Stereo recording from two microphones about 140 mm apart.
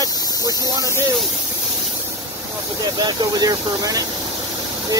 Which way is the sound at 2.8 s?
30° right (ahead or behind).